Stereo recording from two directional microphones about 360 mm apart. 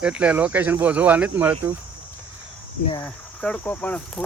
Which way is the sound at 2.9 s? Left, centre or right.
Centre.